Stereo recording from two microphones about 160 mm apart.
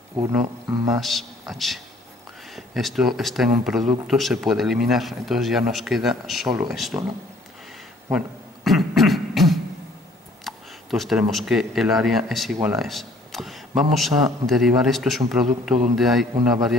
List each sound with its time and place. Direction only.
0.2 s speech: 15° right (ahead or behind)
0.9 s speech: centre (ahead or behind)
8.6 s beatboxing: centre (ahead or behind)
10.4 s speech: centre (ahead or behind)